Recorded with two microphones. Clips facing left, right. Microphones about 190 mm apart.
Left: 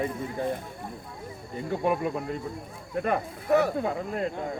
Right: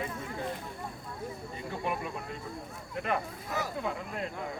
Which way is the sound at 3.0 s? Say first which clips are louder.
Left 5 dB; 55° left (ahead or behind).